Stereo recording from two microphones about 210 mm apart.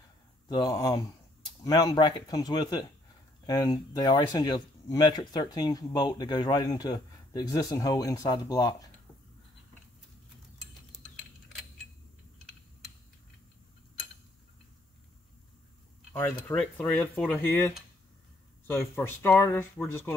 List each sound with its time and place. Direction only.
0.5 s speech: 20° left (ahead or behind)
10.9 s typing: centre (ahead or behind)
16.1 s speech: 10° left (ahead or behind)